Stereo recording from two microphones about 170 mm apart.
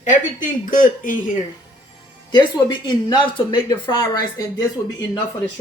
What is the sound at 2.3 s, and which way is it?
Speech, 25° left (ahead or behind).